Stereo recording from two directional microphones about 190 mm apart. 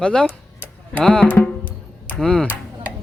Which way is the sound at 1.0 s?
5° left (ahead or behind).